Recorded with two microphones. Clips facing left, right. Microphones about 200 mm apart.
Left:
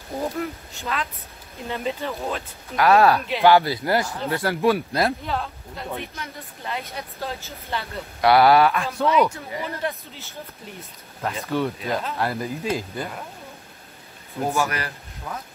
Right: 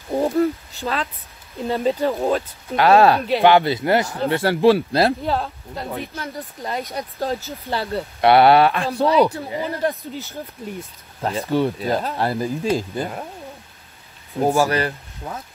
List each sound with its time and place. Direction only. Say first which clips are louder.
0.7 s speech: right 4 dB; 30° right (ahead or behind)
2.7 s speech: right 3 dB; 30° right (ahead or behind)
11.2 s speech: right 5 dB; 30° right (ahead or behind)
14.4 s speech: right 6 dB; 30° right (ahead or behind)